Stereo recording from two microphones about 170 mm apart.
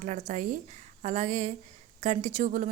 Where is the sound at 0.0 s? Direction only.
50° right (ahead or behind).